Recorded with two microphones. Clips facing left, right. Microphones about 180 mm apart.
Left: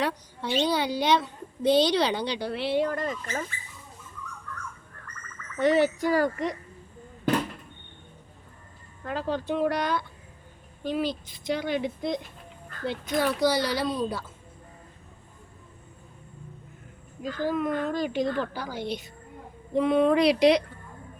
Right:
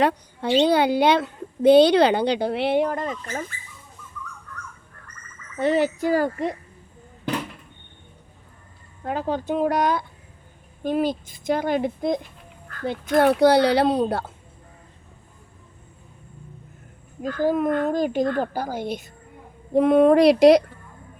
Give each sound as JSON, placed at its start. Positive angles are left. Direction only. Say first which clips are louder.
{"t": 0.0, "sound": "a woman's voice", "louder": "right 7 dB", "side_deg": -60}
{"t": 3.1, "sound": "speech", "louder": "right 2 dB", "side_deg": -45}
{"t": 6.1, "sound": "speech", "louder": "right 2 dB", "side_deg": -55}
{"t": 9.0, "sound": "a woman's voice", "louder": "right 4 dB", "side_deg": -50}
{"t": 17.2, "sound": "speech", "louder": "right 6 dB", "side_deg": -45}